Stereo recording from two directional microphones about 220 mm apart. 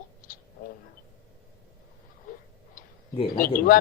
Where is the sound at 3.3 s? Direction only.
40° left (ahead or behind).